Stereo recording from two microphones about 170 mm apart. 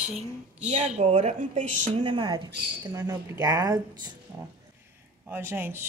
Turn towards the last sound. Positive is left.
turn(degrees=-15)  # may be behind; listen again after turning